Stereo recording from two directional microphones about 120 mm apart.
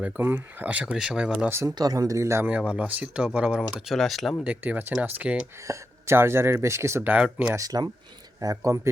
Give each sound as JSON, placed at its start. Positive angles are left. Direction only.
{"t": 0.0, "sound": "speech", "side_deg": -15}
{"t": 1.5, "sound": "speech", "side_deg": -20}
{"t": 1.7, "sound": "speech", "side_deg": -30}
{"t": 2.5, "sound": "speech", "side_deg": -10}
{"t": 4.4, "sound": "speech", "side_deg": -10}
{"t": 7.5, "sound": "speech", "side_deg": -30}